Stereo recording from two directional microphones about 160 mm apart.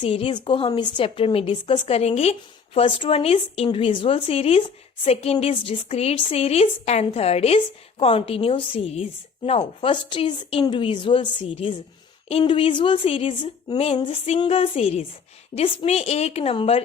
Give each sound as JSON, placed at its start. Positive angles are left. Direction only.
{"t": 0.0, "sound": "a woman's voice", "side_deg": 35}